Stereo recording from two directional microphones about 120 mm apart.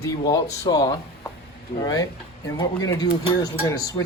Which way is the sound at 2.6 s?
30° left (ahead or behind).